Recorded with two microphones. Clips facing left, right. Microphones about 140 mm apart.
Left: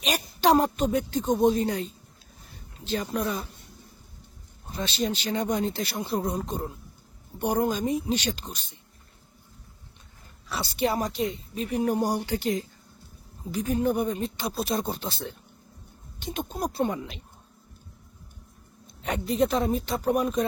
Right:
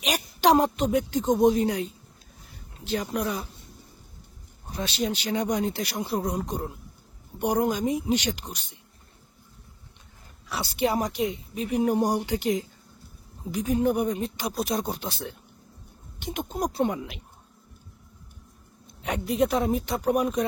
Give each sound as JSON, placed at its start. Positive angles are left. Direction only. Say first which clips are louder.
{"t": 0.0, "sound": "a woman's voice", "louder": "right 1 dB", "side_deg": -15}
{"t": 4.7, "sound": "speech", "louder": "even", "side_deg": -15}
{"t": 10.8, "sound": "speech", "louder": "right 1 dB", "side_deg": -15}
{"t": 19.0, "sound": "speech", "louder": "even", "side_deg": -15}